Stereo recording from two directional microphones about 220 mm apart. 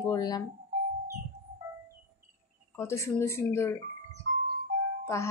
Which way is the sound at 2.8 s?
10° left (ahead or behind).